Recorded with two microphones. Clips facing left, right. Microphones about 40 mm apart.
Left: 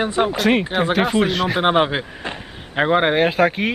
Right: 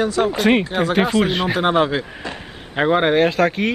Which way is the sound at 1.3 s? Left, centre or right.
Centre.